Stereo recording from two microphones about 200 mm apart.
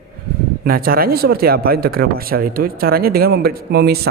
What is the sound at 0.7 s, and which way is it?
Speech, 45° right (ahead or behind).